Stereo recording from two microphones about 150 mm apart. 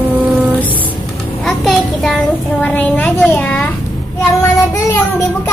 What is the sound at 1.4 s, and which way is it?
Child singing, centre (ahead or behind).